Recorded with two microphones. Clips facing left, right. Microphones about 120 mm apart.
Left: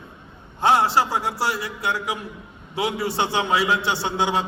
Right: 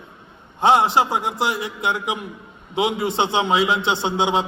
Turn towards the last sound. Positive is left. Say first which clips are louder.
# right 3 dB
turn(degrees=-20)  # may be behind; listen again after turning